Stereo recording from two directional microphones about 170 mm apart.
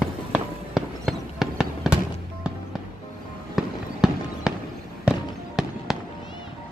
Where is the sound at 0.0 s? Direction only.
Centre (ahead or behind).